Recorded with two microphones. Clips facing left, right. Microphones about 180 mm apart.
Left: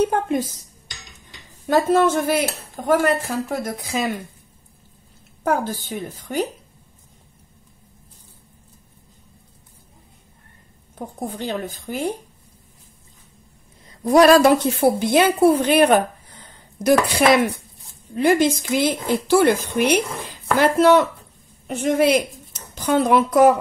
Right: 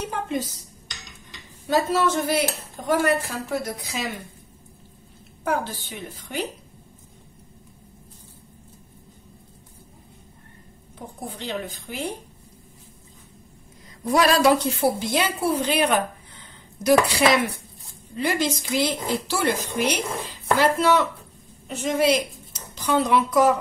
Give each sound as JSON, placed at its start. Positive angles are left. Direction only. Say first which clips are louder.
{"t": 0.1, "sound": "speech", "louder": "left 6 dB", "side_deg": 50}
{"t": 1.7, "sound": "speech", "louder": "left 5 dB", "side_deg": 50}
{"t": 5.4, "sound": "speech", "louder": "left 4 dB", "side_deg": 45}
{"t": 11.2, "sound": "speech", "louder": "left 4 dB", "side_deg": 45}
{"t": 14.0, "sound": "a woman's voice", "louder": "left 6 dB", "side_deg": 45}